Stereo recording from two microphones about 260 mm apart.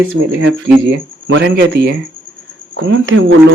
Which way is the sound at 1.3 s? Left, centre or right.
Right.